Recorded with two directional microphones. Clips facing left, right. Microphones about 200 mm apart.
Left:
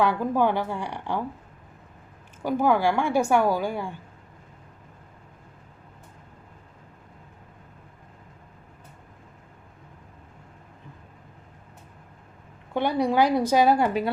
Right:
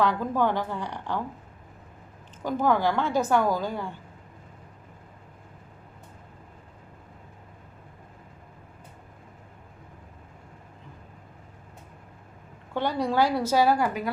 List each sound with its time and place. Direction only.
0.0 s a woman's voice: 10° left (ahead or behind)
2.4 s a woman's voice: 10° left (ahead or behind)
12.7 s a woman's voice: 15° left (ahead or behind)